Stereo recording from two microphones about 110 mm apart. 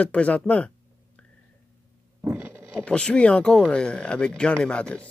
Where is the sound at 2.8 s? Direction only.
10° left (ahead or behind).